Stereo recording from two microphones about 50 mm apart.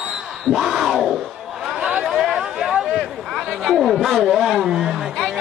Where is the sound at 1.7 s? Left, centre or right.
Right.